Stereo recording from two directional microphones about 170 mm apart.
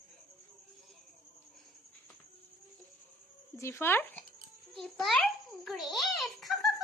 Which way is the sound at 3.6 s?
15° left (ahead or behind).